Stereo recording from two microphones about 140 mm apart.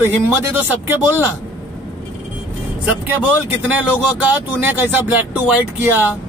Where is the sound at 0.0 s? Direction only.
15° right (ahead or behind).